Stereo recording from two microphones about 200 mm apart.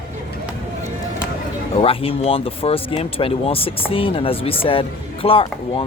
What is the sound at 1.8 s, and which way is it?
Speech, 30° left (ahead or behind).